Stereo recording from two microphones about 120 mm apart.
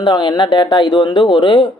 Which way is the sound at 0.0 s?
40° left (ahead or behind).